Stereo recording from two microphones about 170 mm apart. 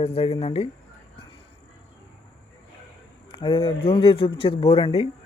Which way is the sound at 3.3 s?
30° left (ahead or behind).